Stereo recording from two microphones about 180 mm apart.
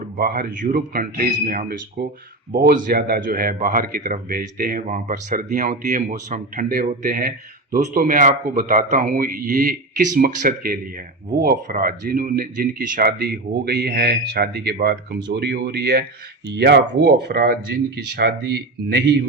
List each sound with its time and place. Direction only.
0.0 s speech: 55° right (ahead or behind)